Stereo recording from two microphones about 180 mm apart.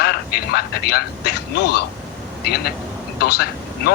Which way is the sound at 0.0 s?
60° left (ahead or behind).